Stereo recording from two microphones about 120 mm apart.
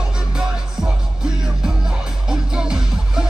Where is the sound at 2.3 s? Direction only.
5° right (ahead or behind).